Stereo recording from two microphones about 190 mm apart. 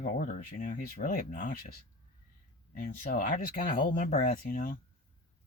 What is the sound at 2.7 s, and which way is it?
Speech, 45° left (ahead or behind).